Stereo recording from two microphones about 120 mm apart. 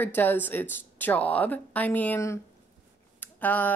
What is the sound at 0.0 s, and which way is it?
Speech, 15° left (ahead or behind).